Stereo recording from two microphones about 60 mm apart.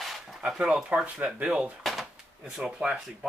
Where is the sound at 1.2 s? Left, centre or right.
Centre.